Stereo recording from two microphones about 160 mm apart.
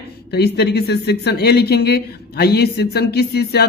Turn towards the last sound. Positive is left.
turn(degrees=90)